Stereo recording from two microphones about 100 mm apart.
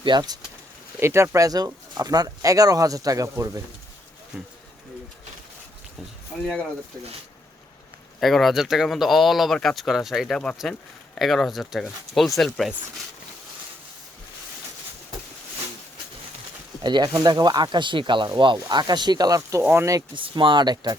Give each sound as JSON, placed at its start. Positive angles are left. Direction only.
{"t": 0.0, "sound": "speech", "side_deg": -45}
{"t": 0.9, "sound": "speech", "side_deg": -25}
{"t": 6.4, "sound": "speech", "side_deg": 10}
{"t": 8.2, "sound": "speech", "side_deg": 0}
{"t": 16.8, "sound": "speech", "side_deg": -45}
{"t": 19.4, "sound": "speech", "side_deg": -30}
{"t": 20.1, "sound": "speech", "side_deg": -55}